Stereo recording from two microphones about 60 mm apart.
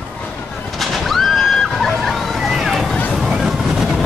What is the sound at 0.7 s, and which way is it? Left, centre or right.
Slosh, centre.